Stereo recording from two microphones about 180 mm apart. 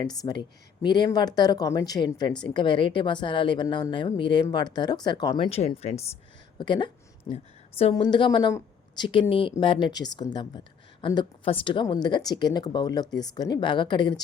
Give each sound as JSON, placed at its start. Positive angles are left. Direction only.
{"t": 0.0, "sound": "a woman's voice", "side_deg": 20}
{"t": 6.6, "sound": "a woman's voice", "side_deg": 25}